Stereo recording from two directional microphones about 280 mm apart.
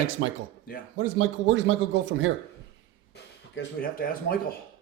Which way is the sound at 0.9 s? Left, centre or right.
Right.